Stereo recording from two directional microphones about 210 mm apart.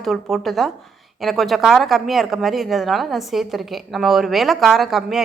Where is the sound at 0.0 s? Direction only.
Centre (ahead or behind).